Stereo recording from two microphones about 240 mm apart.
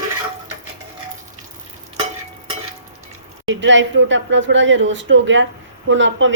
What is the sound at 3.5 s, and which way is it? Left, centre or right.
A woman's voice, right.